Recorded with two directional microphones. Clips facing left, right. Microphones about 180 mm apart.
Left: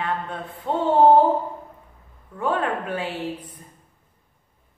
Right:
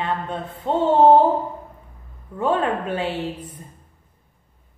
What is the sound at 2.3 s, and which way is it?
A woman's voice, 25° right (ahead or behind).